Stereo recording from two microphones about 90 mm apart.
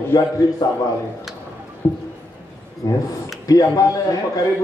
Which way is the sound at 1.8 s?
25° left (ahead or behind).